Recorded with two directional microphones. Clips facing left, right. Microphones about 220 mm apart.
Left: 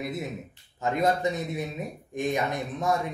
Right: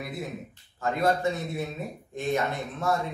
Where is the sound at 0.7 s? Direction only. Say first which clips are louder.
Even; 20° left (ahead or behind).